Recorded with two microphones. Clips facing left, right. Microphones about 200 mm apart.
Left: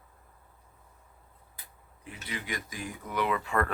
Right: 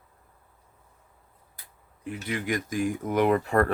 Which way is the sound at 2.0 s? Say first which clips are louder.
Right 9 dB; 50° right (ahead or behind).